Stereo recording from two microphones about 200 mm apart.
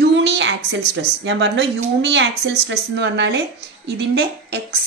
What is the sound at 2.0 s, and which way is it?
Speech, 60° right (ahead or behind).